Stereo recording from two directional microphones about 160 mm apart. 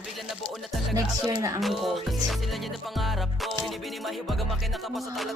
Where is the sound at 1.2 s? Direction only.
20° right (ahead or behind).